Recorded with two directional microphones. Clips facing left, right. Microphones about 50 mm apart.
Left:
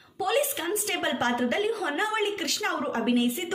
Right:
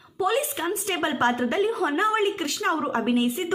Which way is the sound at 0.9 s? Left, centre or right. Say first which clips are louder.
Right 4 dB; right.